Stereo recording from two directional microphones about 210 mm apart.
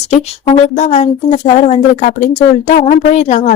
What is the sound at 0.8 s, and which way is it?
A woman's voice, 30° left (ahead or behind).